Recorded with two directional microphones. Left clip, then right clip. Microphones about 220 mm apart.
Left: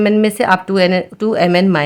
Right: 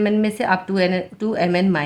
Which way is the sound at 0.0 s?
40° left (ahead or behind).